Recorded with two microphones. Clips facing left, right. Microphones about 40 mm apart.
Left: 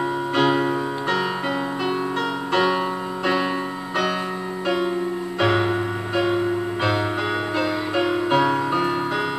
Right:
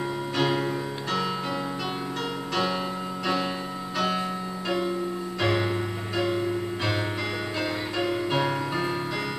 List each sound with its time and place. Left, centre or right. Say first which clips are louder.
0.4 s music: left 6 dB; left
2.5 s music: left 7 dB; left
5.4 s music: left 6 dB; left
7.9 s music: left 7 dB; left